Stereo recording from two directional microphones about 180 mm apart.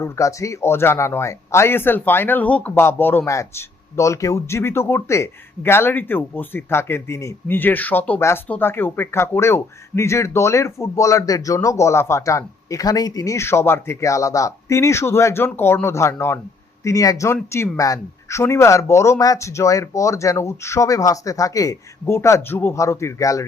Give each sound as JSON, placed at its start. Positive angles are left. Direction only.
{"t": 0.0, "sound": "speech", "side_deg": 15}